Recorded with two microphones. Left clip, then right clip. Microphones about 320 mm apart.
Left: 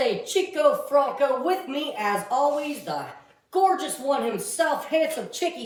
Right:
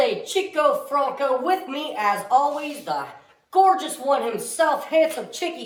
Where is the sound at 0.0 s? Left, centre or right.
Centre.